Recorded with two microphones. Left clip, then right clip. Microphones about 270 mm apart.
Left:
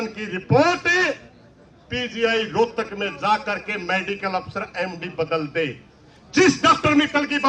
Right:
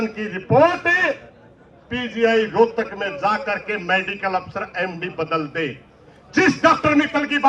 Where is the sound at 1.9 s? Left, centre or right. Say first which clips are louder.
Right 3 dB; right.